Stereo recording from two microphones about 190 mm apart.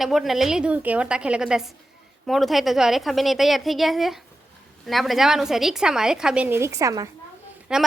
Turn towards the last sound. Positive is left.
turn(degrees=-5)  # may be behind; listen again after turning